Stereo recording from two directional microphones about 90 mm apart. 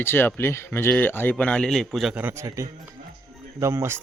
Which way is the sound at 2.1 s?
25° right (ahead or behind).